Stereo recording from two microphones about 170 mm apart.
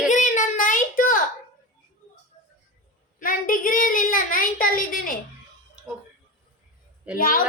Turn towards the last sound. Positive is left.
turn(degrees=55)  # may be behind; listen again after turning